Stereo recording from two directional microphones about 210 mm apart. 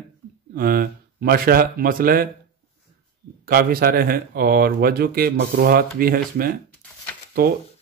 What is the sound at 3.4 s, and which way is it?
Speech, 45° right (ahead or behind).